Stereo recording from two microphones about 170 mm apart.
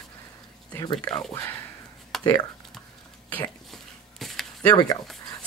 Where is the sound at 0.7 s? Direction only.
25° left (ahead or behind).